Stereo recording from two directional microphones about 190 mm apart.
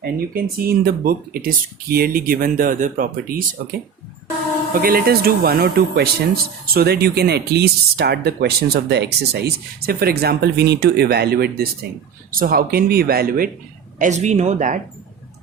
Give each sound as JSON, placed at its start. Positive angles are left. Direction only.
{"t": 0.0, "sound": "speech", "side_deg": -50}
{"t": 14.0, "sound": "speech", "side_deg": -40}